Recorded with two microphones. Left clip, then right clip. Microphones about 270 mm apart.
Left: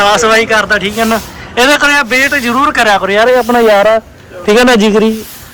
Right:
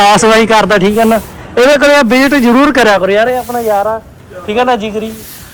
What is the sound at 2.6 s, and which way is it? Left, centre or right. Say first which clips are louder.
Speech: left 1 dB; centre.